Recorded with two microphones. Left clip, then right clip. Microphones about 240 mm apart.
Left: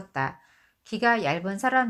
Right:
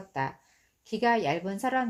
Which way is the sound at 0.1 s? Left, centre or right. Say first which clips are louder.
Left 3 dB; left.